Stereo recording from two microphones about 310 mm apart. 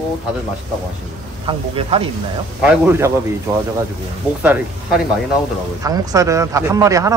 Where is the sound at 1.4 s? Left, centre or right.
Centre.